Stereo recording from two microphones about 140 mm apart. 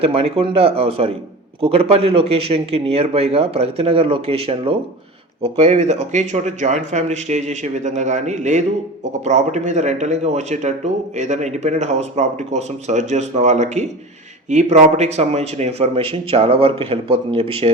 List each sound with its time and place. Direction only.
0.0 s a man's voice: 45° right (ahead or behind)